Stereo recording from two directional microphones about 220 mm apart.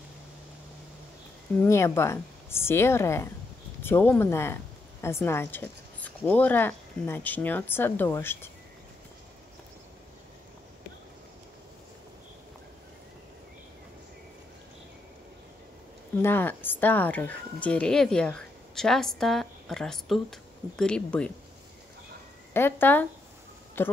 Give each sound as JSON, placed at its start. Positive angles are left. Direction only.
{"t": 1.6, "sound": "a woman's voice", "side_deg": 10}
{"t": 16.2, "sound": "speech", "side_deg": 10}
{"t": 22.5, "sound": "a woman's voice", "side_deg": 10}